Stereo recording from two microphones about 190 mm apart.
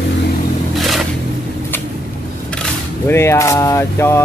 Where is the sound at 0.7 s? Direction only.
Centre (ahead or behind).